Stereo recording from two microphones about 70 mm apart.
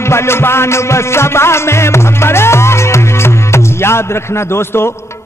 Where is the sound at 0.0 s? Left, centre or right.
Left.